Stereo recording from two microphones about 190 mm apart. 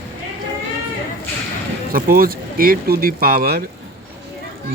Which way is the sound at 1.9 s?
50° right (ahead or behind).